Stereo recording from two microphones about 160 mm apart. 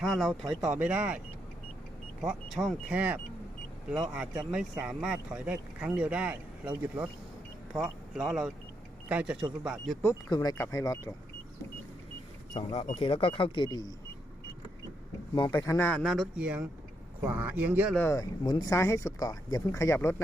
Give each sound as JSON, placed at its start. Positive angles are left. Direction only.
{"t": 0.0, "sound": "speech", "side_deg": 0}
{"t": 2.2, "sound": "speech", "side_deg": 0}
{"t": 10.2, "sound": "speech", "side_deg": 25}
{"t": 12.9, "sound": "speech", "side_deg": 35}
{"t": 15.5, "sound": "speech", "side_deg": 15}
{"t": 15.9, "sound": "speech", "side_deg": 5}
{"t": 16.4, "sound": "speech", "side_deg": -5}
{"t": 17.9, "sound": "speech", "side_deg": 15}